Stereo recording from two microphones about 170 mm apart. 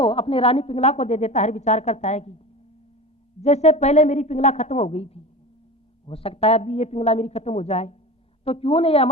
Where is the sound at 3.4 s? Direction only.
40° left (ahead or behind).